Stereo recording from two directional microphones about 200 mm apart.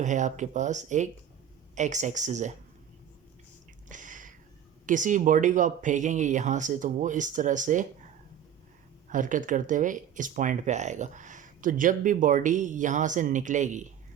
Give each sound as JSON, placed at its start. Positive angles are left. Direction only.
{"t": 0.0, "sound": "speech", "side_deg": -40}
{"t": 3.8, "sound": "a sound", "side_deg": -40}
{"t": 4.9, "sound": "speech", "side_deg": -40}
{"t": 9.0, "sound": "speech", "side_deg": -40}